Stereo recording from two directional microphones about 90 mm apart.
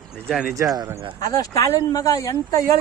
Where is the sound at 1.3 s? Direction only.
40° left (ahead or behind).